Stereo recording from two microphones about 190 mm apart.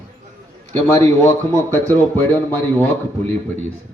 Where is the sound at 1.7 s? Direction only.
10° left (ahead or behind).